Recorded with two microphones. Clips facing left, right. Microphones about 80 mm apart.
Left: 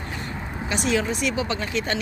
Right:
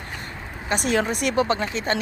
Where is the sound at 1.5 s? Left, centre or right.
Right.